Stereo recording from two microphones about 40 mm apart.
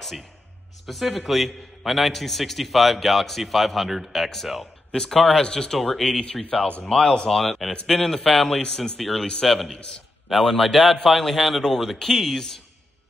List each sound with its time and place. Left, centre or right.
0.8 s a man's voice: centre
5.8 s a man's voice: centre